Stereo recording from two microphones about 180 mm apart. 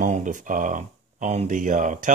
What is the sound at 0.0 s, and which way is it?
Speech, 45° right (ahead or behind).